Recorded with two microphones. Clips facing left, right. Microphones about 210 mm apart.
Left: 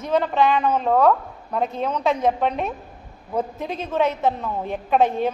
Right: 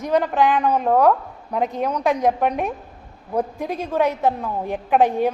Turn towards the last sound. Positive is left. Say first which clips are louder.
# right 2 dB
turn(degrees=-15)  # may be behind; listen again after turning